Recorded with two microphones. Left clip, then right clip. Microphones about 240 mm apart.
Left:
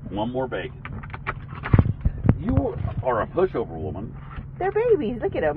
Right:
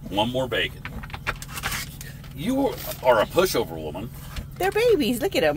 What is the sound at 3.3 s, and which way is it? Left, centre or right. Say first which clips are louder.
Speech: right 2 dB; right.